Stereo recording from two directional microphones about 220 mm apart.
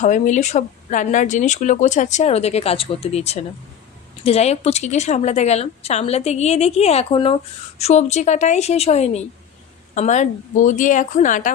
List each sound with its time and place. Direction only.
0.0 s a woman's voice: 35° left (ahead or behind)